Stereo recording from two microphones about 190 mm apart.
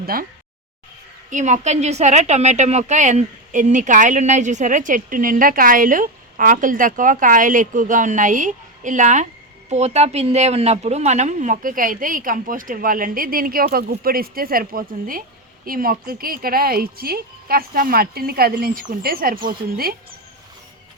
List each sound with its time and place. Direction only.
0.0 s speech: 50° right (ahead or behind)
1.3 s a woman's voice: 40° right (ahead or behind)